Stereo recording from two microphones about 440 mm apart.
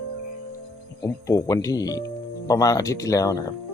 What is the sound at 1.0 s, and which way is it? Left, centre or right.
Speech, centre.